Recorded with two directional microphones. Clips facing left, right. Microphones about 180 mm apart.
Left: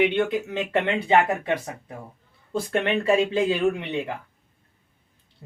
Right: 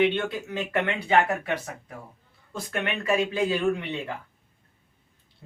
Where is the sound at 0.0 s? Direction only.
15° left (ahead or behind).